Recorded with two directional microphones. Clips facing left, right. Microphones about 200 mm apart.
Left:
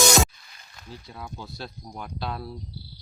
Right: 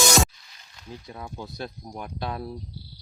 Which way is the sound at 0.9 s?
20° right (ahead or behind).